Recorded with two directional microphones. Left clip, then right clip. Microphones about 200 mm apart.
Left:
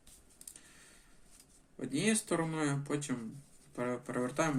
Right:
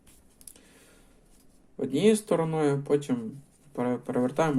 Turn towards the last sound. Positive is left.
turn(degrees=-20)  # may be behind; listen again after turning